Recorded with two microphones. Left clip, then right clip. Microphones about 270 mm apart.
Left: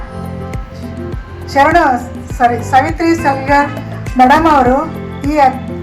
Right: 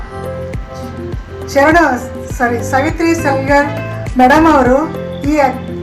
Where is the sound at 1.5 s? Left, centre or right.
Left.